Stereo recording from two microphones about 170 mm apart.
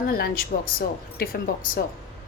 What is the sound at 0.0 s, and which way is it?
A woman's voice, 60° left (ahead or behind).